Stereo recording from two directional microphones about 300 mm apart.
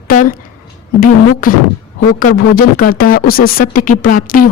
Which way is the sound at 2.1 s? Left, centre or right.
Left.